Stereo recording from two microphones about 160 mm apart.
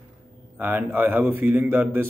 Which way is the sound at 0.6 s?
10° right (ahead or behind).